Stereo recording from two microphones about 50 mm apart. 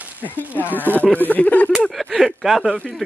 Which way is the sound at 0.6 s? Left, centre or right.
Right.